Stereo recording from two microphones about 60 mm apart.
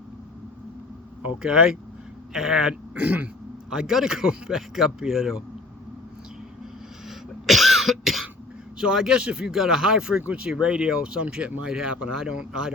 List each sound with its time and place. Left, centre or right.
1.4 s speech: centre
2.9 s speech: right
3.7 s speech: centre
7.4 s cough: centre
8.8 s speech: centre